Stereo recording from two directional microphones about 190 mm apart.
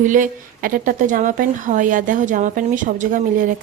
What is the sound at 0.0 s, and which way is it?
A woman's voice, 45° right (ahead or behind).